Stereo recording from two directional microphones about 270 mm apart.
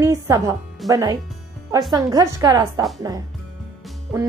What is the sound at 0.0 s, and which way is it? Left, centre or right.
Speech, centre.